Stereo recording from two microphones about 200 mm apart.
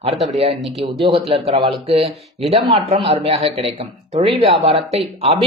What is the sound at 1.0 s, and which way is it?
Speech, 30° right (ahead or behind).